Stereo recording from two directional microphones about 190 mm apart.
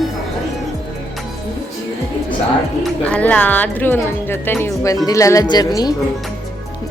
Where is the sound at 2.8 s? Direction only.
5° left (ahead or behind).